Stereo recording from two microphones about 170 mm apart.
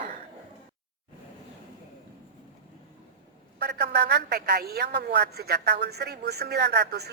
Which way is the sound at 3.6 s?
85° right.